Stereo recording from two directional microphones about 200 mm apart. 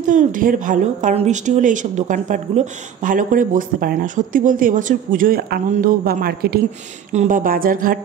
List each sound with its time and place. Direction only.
0.0 s speech: 40° right (ahead or behind)